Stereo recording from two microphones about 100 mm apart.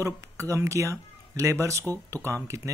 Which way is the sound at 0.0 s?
30° right (ahead or behind).